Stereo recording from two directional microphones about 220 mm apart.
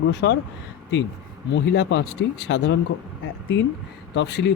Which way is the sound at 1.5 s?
55° left (ahead or behind).